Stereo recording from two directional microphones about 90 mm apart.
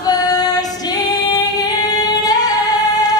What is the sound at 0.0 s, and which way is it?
Female singing, 45° left (ahead or behind).